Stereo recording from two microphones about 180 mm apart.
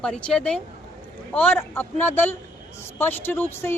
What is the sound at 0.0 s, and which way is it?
Speech, 5° left (ahead or behind).